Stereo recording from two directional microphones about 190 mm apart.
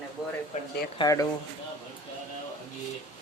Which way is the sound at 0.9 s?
20° left (ahead or behind).